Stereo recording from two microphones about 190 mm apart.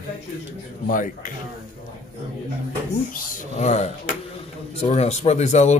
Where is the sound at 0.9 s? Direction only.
45° left (ahead or behind).